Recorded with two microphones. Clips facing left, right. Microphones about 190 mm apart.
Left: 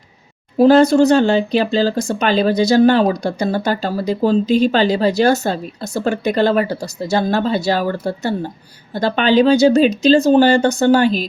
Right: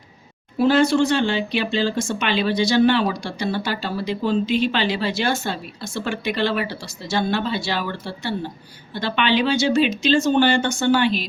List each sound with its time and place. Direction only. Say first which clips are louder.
0.6 s speech: left 7 dB; 40° left (ahead or behind)